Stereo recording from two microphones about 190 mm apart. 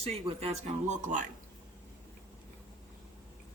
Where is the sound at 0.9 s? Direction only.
40° right (ahead or behind).